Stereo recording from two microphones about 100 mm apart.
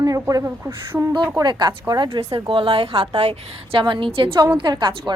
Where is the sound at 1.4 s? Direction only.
45° right (ahead or behind); by 3.3 s 70° right (ahead or behind).